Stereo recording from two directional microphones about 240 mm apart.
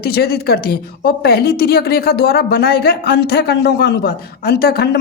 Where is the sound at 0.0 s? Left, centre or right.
Left.